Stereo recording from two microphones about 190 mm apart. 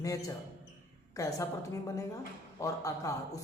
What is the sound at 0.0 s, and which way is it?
A man's voice, 15° left (ahead or behind).